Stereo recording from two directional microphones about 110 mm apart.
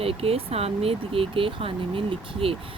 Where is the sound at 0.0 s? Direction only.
60° right (ahead or behind).